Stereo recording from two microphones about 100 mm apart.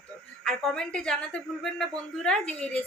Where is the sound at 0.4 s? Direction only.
5° left (ahead or behind).